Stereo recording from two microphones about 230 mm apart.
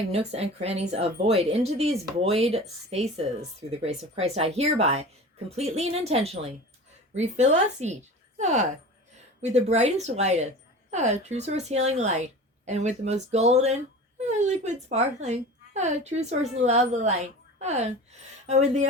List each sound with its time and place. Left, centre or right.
0.1 s a woman's voice: right